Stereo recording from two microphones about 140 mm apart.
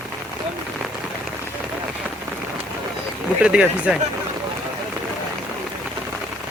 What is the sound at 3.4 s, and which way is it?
Speech, 10° right (ahead or behind).